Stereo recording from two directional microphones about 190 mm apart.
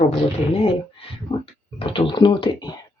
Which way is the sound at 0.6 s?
30° left (ahead or behind).